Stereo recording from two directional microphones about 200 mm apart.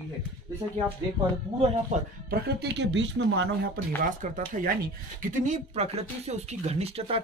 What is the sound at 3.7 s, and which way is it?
Speech, 40° right (ahead or behind).